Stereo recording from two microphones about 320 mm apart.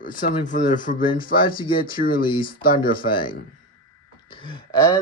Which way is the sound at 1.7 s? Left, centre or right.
Left.